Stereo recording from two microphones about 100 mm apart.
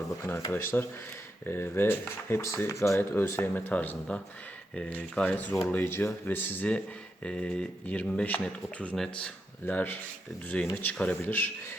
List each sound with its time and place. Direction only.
0.2 s speech: 25° left (ahead or behind)